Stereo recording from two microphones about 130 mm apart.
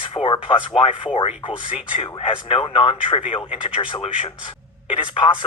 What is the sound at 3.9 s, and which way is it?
Speech, 45° left (ahead or behind).